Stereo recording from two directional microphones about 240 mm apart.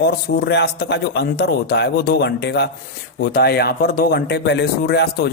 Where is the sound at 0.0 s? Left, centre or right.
Left.